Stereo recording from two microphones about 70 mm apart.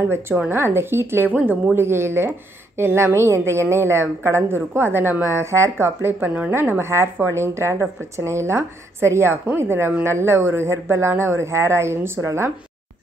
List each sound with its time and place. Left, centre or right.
0.5 s a woman's voice: right
6.2 s a woman's voice: right